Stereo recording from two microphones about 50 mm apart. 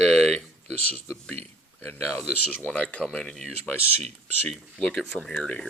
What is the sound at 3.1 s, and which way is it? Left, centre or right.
Speech, centre.